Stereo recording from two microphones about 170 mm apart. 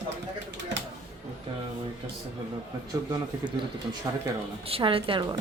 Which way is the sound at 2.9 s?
25° right (ahead or behind).